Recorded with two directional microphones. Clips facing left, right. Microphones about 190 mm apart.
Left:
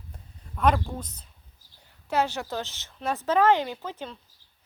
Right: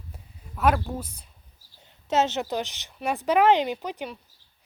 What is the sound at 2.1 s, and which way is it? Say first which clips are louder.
Speech: right 3 dB; 20° right (ahead or behind).